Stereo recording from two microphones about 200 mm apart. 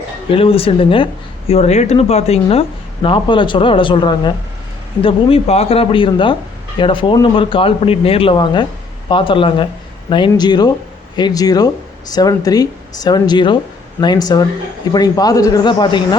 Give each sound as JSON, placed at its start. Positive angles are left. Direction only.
{"t": 0.3, "sound": "speech", "side_deg": 30}